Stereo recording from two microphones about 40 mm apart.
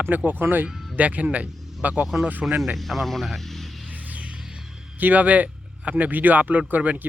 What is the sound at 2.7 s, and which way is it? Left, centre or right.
Speech, centre.